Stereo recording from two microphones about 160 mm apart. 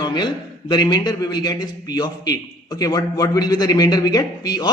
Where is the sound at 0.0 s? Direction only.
25° left (ahead or behind).